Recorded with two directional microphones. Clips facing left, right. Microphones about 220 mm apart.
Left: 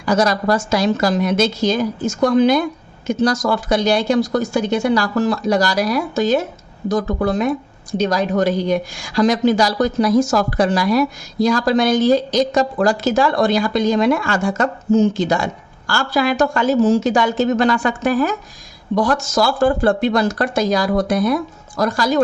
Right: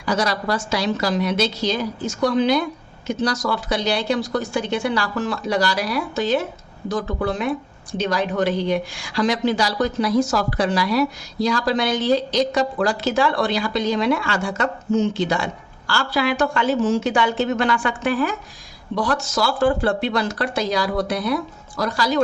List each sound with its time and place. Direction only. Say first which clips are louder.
0.0 s a woman's voice: left 5 dB; 45° left (ahead or behind)